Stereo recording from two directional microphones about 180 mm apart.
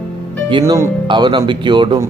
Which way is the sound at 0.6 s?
15° right (ahead or behind).